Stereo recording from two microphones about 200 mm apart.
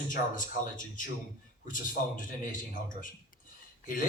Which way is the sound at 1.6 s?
40° left (ahead or behind).